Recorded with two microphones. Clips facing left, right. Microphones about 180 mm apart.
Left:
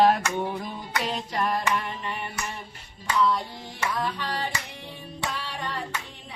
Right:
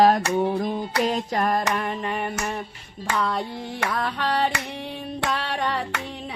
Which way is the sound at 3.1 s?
60° right (ahead or behind).